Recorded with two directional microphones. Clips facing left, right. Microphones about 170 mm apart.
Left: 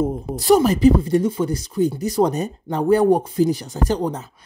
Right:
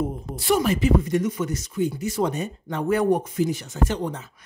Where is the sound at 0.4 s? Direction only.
40° left (ahead or behind).